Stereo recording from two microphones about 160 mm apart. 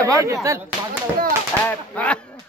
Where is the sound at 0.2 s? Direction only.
20° right (ahead or behind).